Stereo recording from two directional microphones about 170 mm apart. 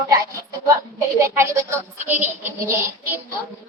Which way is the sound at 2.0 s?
10° right (ahead or behind).